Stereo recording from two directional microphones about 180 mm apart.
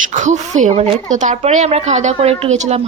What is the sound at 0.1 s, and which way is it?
A woman's voice, 40° right (ahead or behind).